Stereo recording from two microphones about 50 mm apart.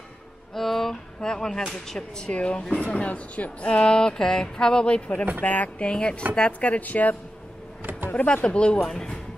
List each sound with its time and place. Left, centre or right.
0.6 s music: centre
1.2 s speech: centre; by 8.5 s left
8.5 s speech: centre